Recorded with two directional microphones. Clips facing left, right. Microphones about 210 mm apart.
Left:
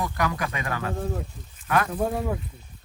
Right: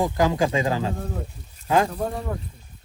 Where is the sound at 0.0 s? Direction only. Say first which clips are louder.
Right 7 dB; 25° right (ahead or behind).